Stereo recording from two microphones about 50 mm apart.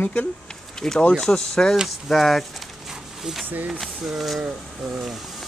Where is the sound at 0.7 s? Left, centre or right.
Centre.